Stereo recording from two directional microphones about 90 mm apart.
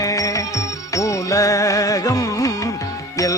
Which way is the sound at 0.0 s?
40° left (ahead or behind).